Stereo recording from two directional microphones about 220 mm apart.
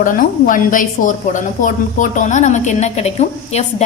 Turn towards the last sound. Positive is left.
turn(degrees=30)  # may be behind; listen again after turning